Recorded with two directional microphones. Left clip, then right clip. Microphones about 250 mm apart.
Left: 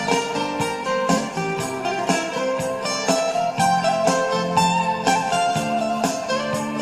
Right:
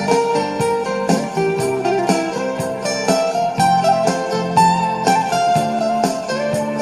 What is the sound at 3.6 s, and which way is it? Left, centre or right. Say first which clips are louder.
Music: right 5 dB; right.